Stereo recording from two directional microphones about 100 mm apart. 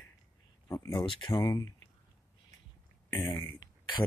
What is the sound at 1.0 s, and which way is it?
Speech, 60° left (ahead or behind).